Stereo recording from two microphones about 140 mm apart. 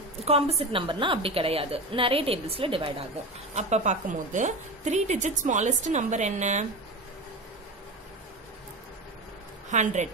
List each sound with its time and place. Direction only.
0.2 s a woman's voice: 45° right (ahead or behind)
3.5 s a woman's voice: 55° right (ahead or behind)
9.7 s a woman's voice: 60° right (ahead or behind)